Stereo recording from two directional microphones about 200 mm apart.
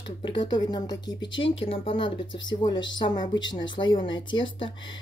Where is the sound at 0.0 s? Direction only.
25° left (ahead or behind).